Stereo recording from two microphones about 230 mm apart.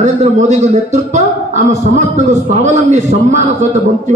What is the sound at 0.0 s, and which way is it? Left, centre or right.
A man's voice, right.